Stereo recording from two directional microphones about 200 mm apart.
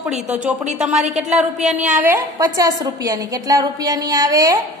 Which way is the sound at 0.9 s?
35° right (ahead or behind).